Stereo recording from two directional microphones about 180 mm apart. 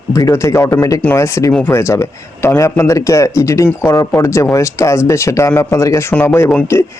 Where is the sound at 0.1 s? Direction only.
15° left (ahead or behind).